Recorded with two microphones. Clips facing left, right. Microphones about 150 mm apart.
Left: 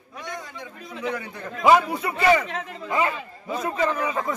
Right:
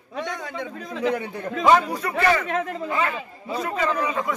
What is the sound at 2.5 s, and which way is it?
Speech, 50° right (ahead or behind).